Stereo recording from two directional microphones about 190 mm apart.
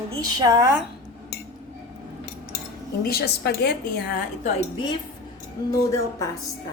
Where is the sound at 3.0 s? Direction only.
55° left (ahead or behind).